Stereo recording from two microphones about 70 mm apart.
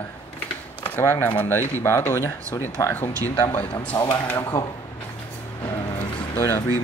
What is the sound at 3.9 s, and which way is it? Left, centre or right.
Speech, left.